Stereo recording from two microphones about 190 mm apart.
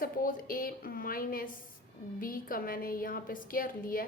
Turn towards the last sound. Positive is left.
turn(degrees=50)  # may be behind; listen again after turning